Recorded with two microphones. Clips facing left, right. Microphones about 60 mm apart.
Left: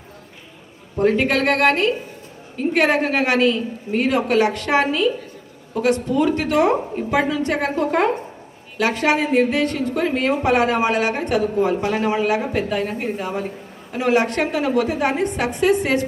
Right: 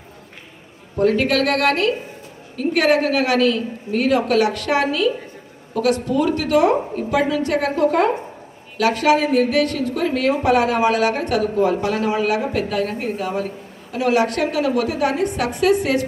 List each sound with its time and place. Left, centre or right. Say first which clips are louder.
0.9 s a woman's voice: right 1 dB; left